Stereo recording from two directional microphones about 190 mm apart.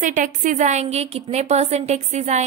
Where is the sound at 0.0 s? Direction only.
40° right (ahead or behind).